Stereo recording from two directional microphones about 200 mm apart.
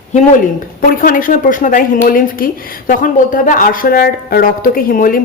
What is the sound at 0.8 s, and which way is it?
Speech, 45° left (ahead or behind).